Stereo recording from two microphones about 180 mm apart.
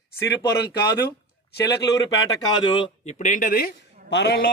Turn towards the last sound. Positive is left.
turn(degrees=65)  # may be behind; listen again after turning